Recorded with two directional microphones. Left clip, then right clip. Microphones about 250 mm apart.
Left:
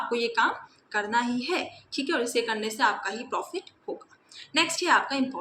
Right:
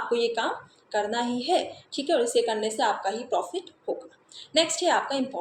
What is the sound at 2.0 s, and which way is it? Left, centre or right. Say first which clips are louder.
A woman's voice: right 4 dB; centre.